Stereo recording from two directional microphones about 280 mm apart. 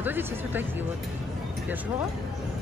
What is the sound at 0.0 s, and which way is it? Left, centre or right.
Speech, centre.